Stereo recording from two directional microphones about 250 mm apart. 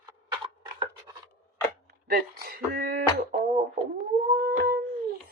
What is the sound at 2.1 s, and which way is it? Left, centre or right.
A woman's voice, right.